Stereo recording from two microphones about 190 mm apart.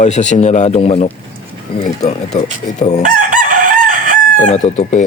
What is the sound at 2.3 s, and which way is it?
Speech, 40° left (ahead or behind).